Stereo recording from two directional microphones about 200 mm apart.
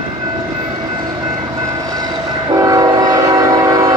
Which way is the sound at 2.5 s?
15° right (ahead or behind).